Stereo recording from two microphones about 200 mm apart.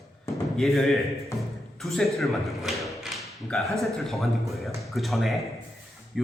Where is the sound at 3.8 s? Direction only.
Centre (ahead or behind).